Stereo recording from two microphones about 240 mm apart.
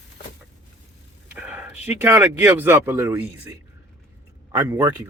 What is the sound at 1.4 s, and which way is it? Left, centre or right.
Speech, centre.